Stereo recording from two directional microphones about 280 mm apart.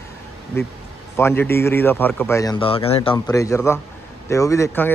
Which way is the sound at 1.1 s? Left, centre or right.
Centre.